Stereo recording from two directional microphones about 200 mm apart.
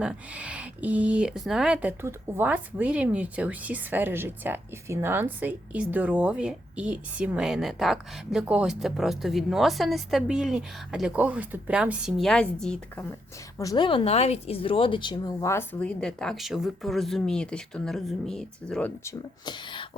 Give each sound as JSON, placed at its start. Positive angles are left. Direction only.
{"t": 0.0, "sound": "speech", "side_deg": -5}
{"t": 13.6, "sound": "speech", "side_deg": 20}
{"t": 19.5, "sound": "speech", "side_deg": 25}